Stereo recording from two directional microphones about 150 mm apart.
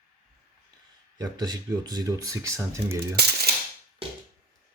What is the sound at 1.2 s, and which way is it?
Speech, 25° right (ahead or behind).